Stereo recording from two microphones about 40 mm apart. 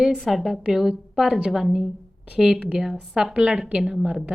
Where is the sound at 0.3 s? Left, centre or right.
Centre.